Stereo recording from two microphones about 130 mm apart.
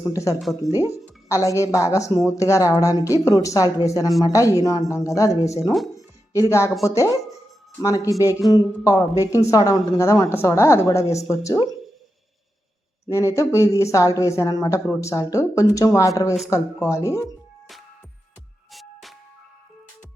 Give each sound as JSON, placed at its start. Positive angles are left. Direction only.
{"t": 0.1, "sound": "speech", "side_deg": 25}
{"t": 0.3, "sound": "speech", "side_deg": 0}
{"t": 0.7, "sound": "speech", "side_deg": 25}
{"t": 5.7, "sound": "music", "side_deg": 0}
{"t": 6.3, "sound": "speech", "side_deg": 25}
{"t": 13.1, "sound": "speech", "side_deg": 25}
{"t": 18.7, "sound": "music", "side_deg": 0}